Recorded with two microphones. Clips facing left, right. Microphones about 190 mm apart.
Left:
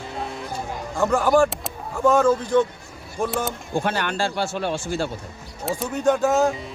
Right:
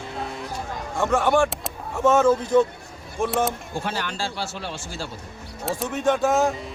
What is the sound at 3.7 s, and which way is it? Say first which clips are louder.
Speech: left 5 dB; 60° left (ahead or behind).